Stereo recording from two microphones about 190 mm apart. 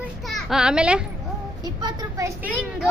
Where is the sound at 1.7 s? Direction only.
20° right (ahead or behind).